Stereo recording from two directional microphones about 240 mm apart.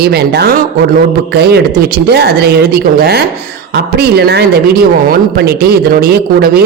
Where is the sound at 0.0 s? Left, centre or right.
Right.